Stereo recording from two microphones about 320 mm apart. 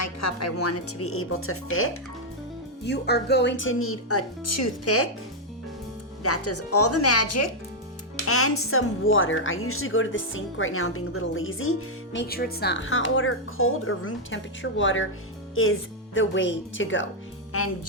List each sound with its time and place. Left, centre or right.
0.0 s speech: left
6.2 s speech: left